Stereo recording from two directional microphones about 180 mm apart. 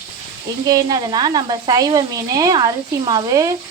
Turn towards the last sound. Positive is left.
turn(degrees=-20)  # may be behind; listen again after turning